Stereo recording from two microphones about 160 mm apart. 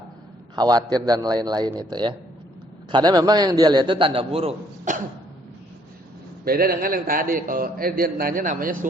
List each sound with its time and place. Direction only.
0.5 s a man's voice: 25° right (ahead or behind)
6.4 s a man's voice: 65° right (ahead or behind)